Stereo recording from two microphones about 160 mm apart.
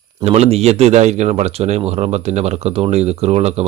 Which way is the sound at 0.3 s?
40° right (ahead or behind).